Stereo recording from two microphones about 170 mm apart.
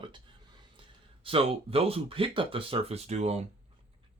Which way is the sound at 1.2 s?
35° right (ahead or behind).